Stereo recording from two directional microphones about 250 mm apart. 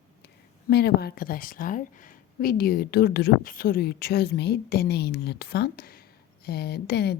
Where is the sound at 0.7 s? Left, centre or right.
Left.